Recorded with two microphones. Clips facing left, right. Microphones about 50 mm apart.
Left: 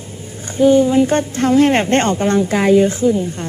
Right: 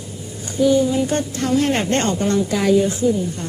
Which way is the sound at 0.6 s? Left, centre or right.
Left.